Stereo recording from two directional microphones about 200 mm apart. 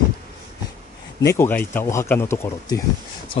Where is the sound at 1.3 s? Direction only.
10° left (ahead or behind).